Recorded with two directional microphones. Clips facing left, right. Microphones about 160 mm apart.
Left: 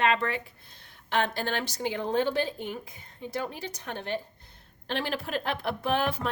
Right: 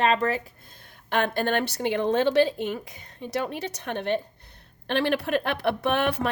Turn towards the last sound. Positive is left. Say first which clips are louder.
# right 3 dB
turn(degrees=-70)  # may be behind; listen again after turning